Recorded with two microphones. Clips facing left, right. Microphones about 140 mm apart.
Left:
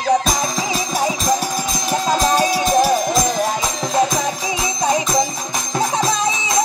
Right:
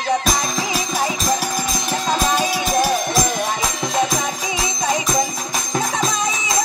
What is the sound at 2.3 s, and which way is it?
Music, 30° left (ahead or behind).